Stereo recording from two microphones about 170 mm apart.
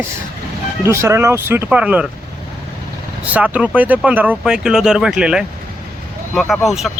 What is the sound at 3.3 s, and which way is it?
A man's voice, 10° right (ahead or behind).